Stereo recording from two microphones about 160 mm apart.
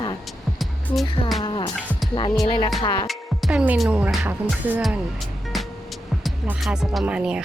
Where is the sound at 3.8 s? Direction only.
10° right (ahead or behind).